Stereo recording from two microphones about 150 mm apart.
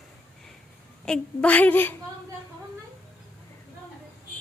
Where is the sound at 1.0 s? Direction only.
5° left (ahead or behind).